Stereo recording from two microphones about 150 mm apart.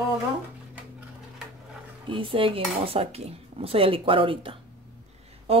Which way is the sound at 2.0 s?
35° right (ahead or behind).